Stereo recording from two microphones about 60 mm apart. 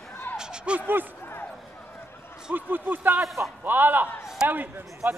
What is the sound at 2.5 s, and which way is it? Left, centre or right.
Speech, right.